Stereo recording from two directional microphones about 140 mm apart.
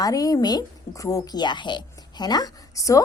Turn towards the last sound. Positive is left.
turn(degrees=25)  # may be behind; listen again after turning